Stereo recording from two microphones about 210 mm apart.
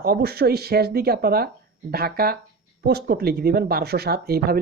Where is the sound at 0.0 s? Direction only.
50° right (ahead or behind).